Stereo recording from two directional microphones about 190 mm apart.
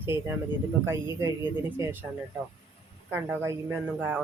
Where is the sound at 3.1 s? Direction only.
10° right (ahead or behind).